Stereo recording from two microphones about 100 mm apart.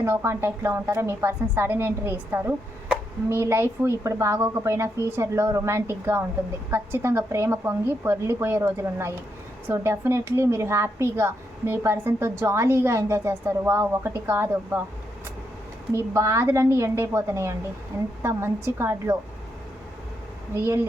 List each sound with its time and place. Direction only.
0.0 s a woman's voice: 25° right (ahead or behind)
15.9 s a woman's voice: 30° right (ahead or behind)
20.6 s a woman's voice: 25° right (ahead or behind)